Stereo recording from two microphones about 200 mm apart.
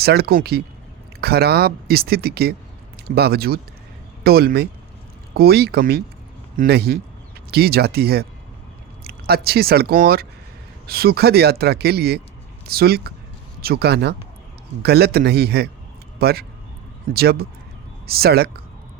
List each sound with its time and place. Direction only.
0.0 s speech: 50° right (ahead or behind)